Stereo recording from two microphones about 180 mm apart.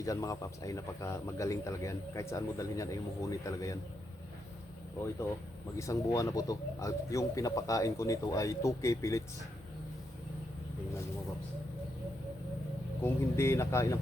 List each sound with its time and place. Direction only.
0.0 s speech: 20° left (ahead or behind)
5.8 s speech: 15° left (ahead or behind)
13.0 s speech: 15° left (ahead or behind)